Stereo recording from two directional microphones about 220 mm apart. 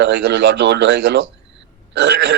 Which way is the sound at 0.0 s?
55° right (ahead or behind).